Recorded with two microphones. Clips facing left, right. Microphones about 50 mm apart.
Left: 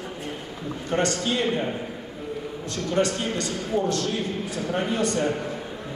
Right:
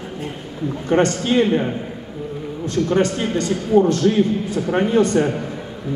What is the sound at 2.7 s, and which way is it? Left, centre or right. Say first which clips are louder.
A man's voice: right 6 dB; right.